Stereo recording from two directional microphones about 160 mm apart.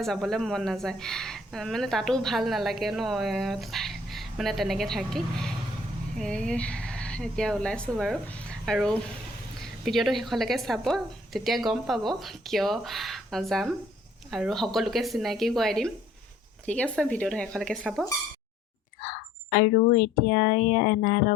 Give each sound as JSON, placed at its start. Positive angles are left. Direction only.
{"t": 0.0, "sound": "a woman's voice", "side_deg": 0}
{"t": 19.0, "sound": "speech", "side_deg": 65}